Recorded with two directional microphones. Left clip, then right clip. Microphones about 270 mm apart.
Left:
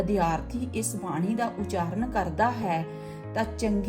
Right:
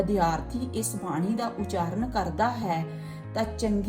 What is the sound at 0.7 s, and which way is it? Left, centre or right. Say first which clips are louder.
Speech: even; left.